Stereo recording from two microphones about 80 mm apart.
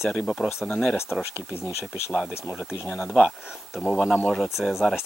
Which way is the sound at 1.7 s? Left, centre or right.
Left.